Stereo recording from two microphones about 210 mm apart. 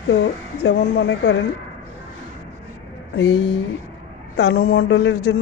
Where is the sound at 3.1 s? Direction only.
60° left (ahead or behind); by 4.7 s 75° left (ahead or behind).